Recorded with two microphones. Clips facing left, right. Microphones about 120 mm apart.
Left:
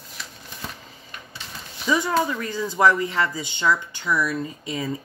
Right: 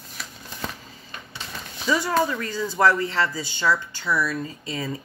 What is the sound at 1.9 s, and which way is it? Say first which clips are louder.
Speech: even; 20° left (ahead or behind).